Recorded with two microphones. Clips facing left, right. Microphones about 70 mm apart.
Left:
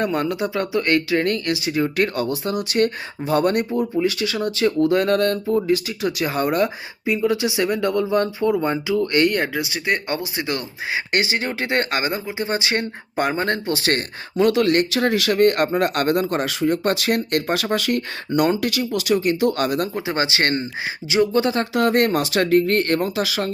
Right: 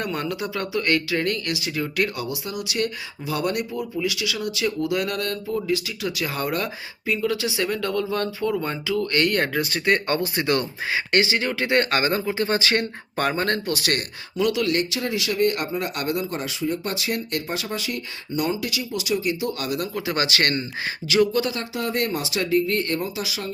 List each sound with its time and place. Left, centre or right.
0.0 s speech: left
2.1 s speech: left
9.4 s speech: centre
10.9 s speech: left
19.9 s speech: left
21.6 s speech: left